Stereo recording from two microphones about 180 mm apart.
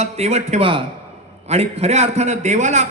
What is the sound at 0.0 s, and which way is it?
A man's voice, 35° right (ahead or behind).